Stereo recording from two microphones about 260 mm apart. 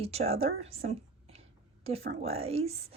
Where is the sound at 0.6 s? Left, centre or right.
Right.